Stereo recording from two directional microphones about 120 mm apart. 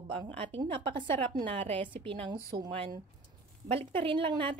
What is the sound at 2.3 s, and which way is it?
A woman's voice, 40° right (ahead or behind).